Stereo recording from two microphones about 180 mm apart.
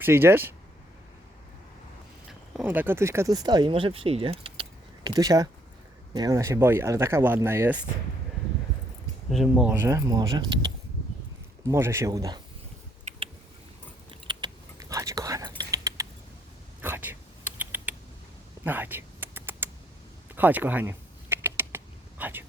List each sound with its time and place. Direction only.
0.0 s speech: 10° right (ahead or behind)
2.5 s speech: 5° right (ahead or behind)
9.3 s speech: centre (ahead or behind); by 10.4 s 20° right (ahead or behind)
11.6 s speech: 15° right (ahead or behind)
13.1 s a sound: 30° right (ahead or behind)
14.1 s whispering: 25° right (ahead or behind)
16.8 s a sound: 10° right (ahead or behind)
20.3 s typing: 10° right (ahead or behind)
22.2 s a sound: 10° right (ahead or behind)